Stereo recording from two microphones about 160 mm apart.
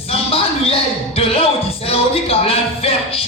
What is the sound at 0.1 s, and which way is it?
Music, 35° left (ahead or behind).